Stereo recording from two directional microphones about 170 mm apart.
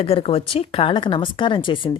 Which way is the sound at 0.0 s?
35° left (ahead or behind).